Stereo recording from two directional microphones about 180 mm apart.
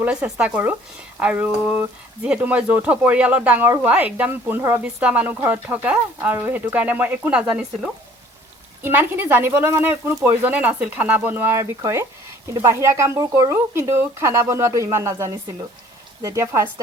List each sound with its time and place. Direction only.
0.0 s speech: 5° right (ahead or behind)